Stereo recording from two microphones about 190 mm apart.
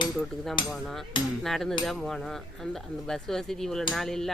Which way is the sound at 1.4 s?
Centre (ahead or behind).